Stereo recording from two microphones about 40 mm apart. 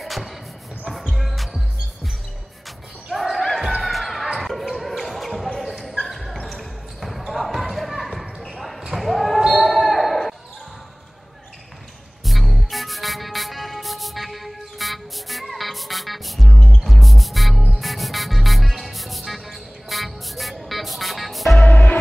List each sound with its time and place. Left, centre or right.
0.0 s basketball bounce: centre
0.8 s music: centre
3.2 s basketball bounce: centre
3.8 s music: centre
4.4 s basketball bounce: centre
12.3 s music: centre
21.6 s music: left